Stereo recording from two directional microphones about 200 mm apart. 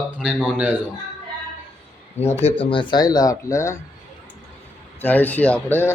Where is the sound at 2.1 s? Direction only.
30° left (ahead or behind); by 3.8 s 15° left (ahead or behind).